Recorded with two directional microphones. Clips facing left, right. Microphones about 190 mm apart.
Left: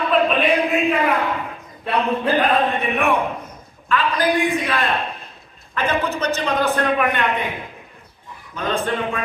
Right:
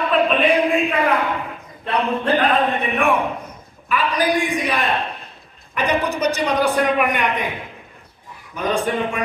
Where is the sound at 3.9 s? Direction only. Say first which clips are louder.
Even; 15° right (ahead or behind).